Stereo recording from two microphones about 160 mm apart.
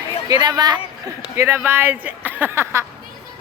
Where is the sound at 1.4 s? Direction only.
15° right (ahead or behind).